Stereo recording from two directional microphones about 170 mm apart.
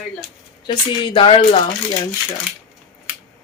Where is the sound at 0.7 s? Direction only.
30° left (ahead or behind).